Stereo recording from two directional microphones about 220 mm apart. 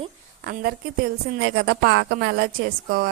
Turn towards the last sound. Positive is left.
turn(degrees=-45)  # may be behind; listen again after turning